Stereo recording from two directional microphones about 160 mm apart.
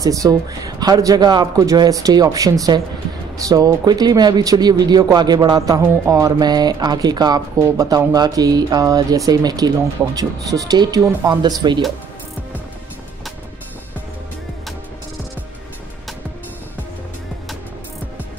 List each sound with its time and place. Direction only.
0.0 s speech: 20° right (ahead or behind)